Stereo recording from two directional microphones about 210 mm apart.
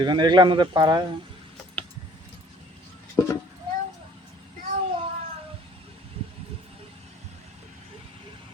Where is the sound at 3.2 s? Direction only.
15° left (ahead or behind).